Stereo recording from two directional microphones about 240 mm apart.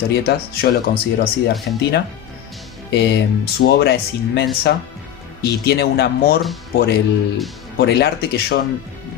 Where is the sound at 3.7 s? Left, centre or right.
Left.